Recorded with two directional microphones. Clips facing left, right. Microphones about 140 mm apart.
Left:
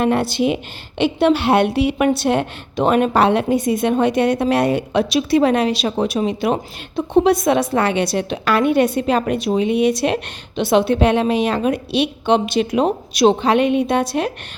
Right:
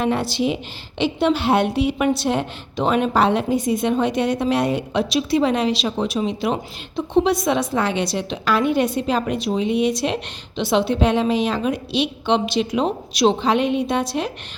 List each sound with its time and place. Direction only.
0.0 s a woman's voice: 55° left (ahead or behind)